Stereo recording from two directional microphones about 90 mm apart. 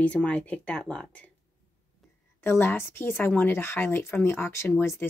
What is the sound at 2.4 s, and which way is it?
Speech, 25° left (ahead or behind).